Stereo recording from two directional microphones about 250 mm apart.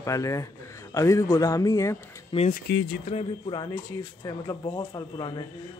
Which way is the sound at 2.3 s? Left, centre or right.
Left.